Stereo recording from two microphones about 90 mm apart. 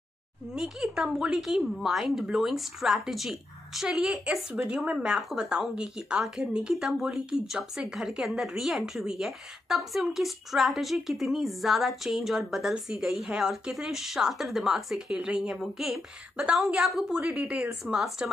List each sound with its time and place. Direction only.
0.6 s a woman's voice: 5° right (ahead or behind)